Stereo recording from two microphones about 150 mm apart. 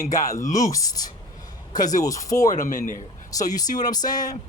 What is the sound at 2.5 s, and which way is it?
Speech, 65° left (ahead or behind).